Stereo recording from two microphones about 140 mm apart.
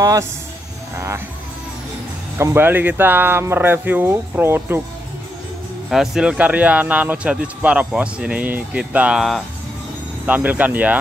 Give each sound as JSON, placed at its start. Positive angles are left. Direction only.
{"t": 0.0, "sound": "speech", "side_deg": -25}
{"t": 0.9, "sound": "music", "side_deg": -20}
{"t": 2.3, "sound": "speech", "side_deg": -15}
{"t": 5.9, "sound": "speech", "side_deg": -5}